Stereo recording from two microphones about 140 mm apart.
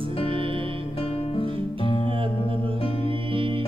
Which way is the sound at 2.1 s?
40° right (ahead or behind).